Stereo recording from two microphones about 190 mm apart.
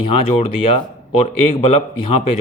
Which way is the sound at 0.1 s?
30° left (ahead or behind).